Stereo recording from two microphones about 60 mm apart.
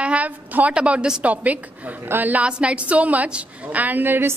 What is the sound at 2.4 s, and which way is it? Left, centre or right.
A woman's voice, centre.